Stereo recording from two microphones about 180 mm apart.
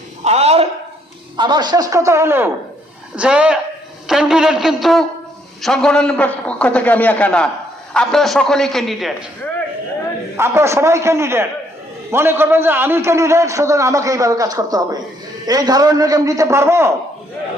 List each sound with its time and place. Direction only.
0.3 s a sound: 35° right (ahead or behind)
1.4 s a man's voice: 25° right (ahead or behind); by 9.1 s centre (ahead or behind)
10.3 s a man's voice: 15° right (ahead or behind)